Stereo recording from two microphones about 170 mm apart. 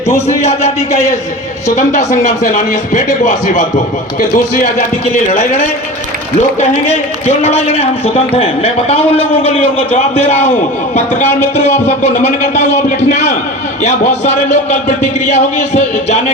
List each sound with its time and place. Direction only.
1.7 s a man's voice: 45° left (ahead or behind)
5.3 s a man's voice: 40° left (ahead or behind)
11.5 s a man's voice: 40° left (ahead or behind)